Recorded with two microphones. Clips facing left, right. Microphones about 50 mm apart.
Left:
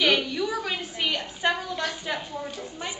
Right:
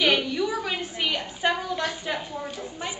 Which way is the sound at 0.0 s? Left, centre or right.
Centre.